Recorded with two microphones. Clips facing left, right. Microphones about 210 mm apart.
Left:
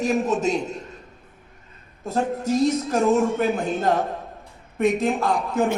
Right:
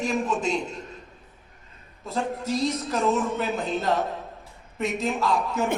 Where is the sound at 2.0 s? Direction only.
45° left (ahead or behind).